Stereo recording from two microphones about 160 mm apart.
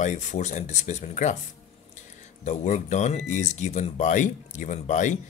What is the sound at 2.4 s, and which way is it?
Speech, 50° left (ahead or behind).